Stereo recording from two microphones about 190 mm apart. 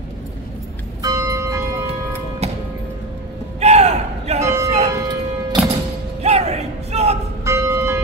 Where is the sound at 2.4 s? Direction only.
35° right (ahead or behind).